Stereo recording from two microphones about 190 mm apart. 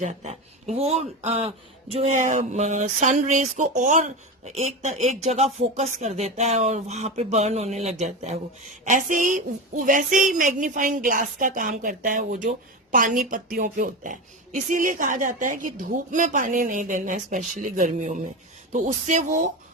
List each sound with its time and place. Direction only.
0.0 s a woman's voice: 35° right (ahead or behind)